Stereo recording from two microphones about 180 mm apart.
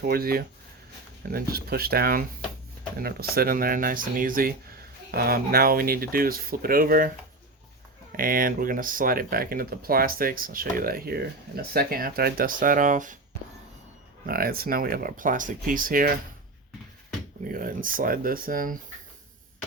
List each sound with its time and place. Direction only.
0.0 s speech: 55° right (ahead or behind)
8.1 s speech: 50° right (ahead or behind)
14.3 s speech: 55° right (ahead or behind)
17.5 s speech: 50° right (ahead or behind)